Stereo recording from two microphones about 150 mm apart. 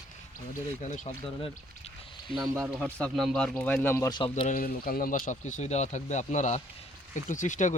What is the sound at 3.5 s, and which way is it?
Speech, 10° left (ahead or behind).